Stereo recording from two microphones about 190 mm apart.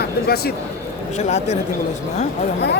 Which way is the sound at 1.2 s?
35° left (ahead or behind).